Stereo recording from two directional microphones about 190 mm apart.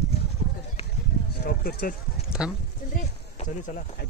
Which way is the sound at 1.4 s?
55° left (ahead or behind).